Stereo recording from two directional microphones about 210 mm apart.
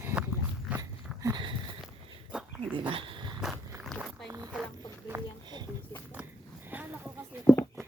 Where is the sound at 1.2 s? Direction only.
20° right (ahead or behind).